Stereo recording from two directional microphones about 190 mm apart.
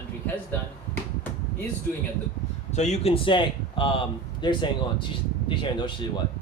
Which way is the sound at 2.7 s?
35° left (ahead or behind).